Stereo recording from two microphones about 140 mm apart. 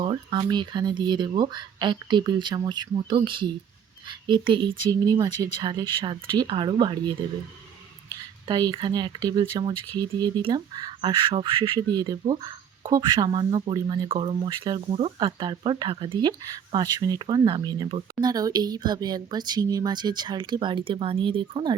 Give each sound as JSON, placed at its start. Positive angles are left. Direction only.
{"t": 0.0, "sound": "speech", "side_deg": -35}
{"t": 8.4, "sound": "speech", "side_deg": -30}